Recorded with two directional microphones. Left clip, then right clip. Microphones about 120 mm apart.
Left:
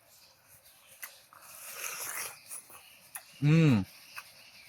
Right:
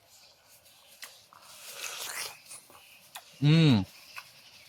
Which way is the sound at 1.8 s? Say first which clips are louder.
Right 2 dB; 5° right (ahead or behind).